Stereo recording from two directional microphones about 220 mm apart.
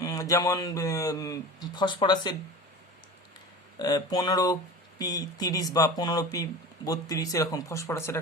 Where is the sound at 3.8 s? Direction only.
15° left (ahead or behind).